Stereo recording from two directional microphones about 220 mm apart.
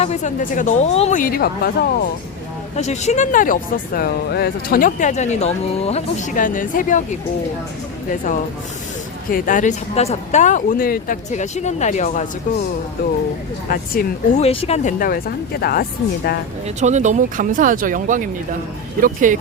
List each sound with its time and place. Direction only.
0.0 s speech: 30° left (ahead or behind)
2.7 s speech: 30° left (ahead or behind)
9.3 s speech: 35° left (ahead or behind)
13.7 s speech: 35° left (ahead or behind)
16.6 s speech: 30° right (ahead or behind)